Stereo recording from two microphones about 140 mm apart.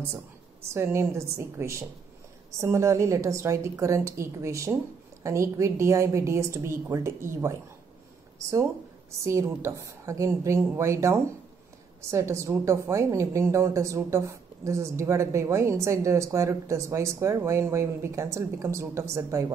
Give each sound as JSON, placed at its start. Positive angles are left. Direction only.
{"t": 0.7, "sound": "a woman's voice", "side_deg": -20}
{"t": 9.2, "sound": "a woman's voice", "side_deg": -20}